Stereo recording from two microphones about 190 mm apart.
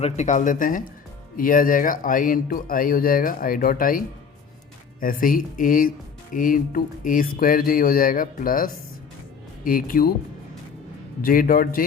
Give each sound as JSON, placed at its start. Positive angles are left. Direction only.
{"t": 0.0, "sound": "speech", "side_deg": 40}
{"t": 11.2, "sound": "speech", "side_deg": 50}